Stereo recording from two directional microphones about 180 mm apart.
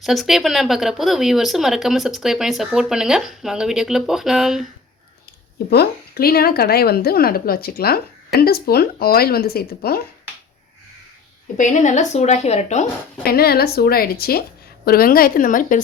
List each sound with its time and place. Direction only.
0.0 s speech: centre (ahead or behind)
5.7 s a woman's voice: 60° left (ahead or behind)
11.5 s speech: 45° left (ahead or behind)
13.2 s a woman's voice: 60° left (ahead or behind)